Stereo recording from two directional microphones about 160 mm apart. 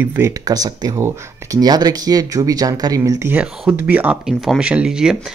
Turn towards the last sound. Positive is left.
turn(degrees=-5)  # may be behind; listen again after turning